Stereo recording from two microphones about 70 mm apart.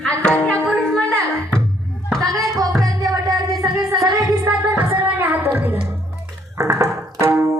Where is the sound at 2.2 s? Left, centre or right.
Right.